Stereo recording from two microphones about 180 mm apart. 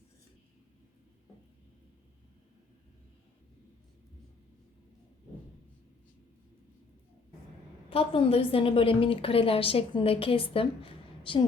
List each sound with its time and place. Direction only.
7.9 s a woman's voice: 30° left (ahead or behind)